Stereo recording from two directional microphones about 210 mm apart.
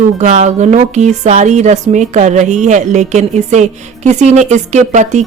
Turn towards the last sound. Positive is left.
turn(degrees=-35)  # may be behind; listen again after turning